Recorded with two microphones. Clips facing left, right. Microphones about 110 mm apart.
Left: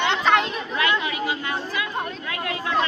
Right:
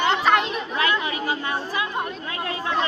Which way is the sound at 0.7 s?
30° right (ahead or behind).